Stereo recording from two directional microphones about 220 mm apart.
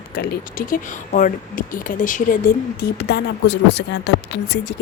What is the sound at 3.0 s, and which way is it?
Speech, 50° left (ahead or behind).